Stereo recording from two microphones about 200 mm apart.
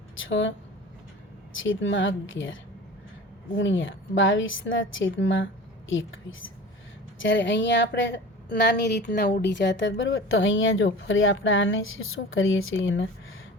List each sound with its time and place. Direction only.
0.2 s speech: 70° left (ahead or behind)
1.6 s speech: 70° left (ahead or behind)